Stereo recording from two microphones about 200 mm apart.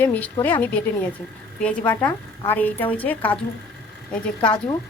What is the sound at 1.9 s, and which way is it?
Speech, 10° left (ahead or behind).